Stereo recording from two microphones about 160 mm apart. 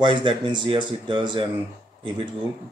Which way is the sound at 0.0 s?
30° right (ahead or behind).